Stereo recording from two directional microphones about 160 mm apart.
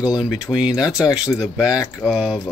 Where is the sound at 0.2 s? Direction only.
5° right (ahead or behind).